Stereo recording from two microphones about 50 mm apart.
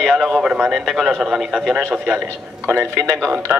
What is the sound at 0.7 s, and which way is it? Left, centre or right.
Speech, centre.